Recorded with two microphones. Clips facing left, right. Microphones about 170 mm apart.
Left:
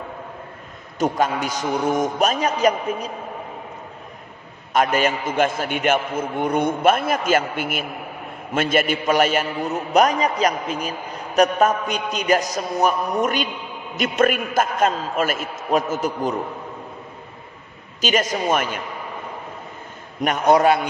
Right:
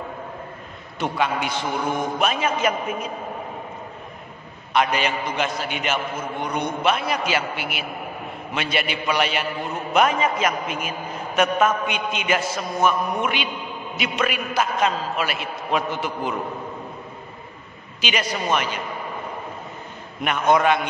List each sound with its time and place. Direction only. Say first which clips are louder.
0.9 s a man's voice: left 3 dB; 40° left (ahead or behind)
4.7 s a man's voice: left 2 dB; 45° left (ahead or behind)
18.0 s a man's voice: left 4 dB; 45° left (ahead or behind)
20.2 s a man's voice: left 3 dB; 40° left (ahead or behind)